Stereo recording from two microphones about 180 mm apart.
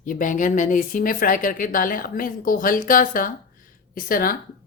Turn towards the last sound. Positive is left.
turn(degrees=50)  # may be behind; listen again after turning